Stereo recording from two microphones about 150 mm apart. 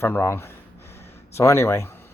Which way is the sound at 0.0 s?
15° left (ahead or behind).